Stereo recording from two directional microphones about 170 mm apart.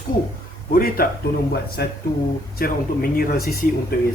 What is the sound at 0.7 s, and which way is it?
Speech, 60° left (ahead or behind).